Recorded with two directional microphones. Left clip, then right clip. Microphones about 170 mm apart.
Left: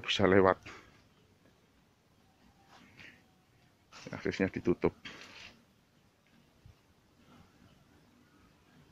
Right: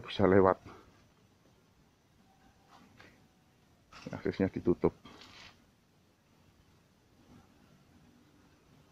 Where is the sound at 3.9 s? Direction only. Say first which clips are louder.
Even; 10° right (ahead or behind).